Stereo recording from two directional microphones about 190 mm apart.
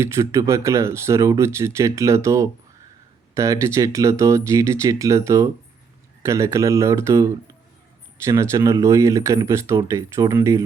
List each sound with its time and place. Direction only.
0.0 s speech: 15° right (ahead or behind)